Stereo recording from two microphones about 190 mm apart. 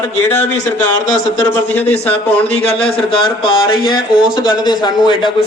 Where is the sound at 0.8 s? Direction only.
20° left (ahead or behind).